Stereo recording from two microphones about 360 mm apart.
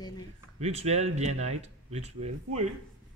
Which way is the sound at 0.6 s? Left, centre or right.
Centre.